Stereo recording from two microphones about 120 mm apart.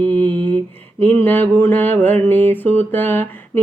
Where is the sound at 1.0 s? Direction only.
15° left (ahead or behind).